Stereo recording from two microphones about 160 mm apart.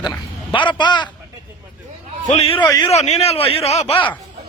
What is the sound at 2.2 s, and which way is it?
A man's voice, 40° left (ahead or behind).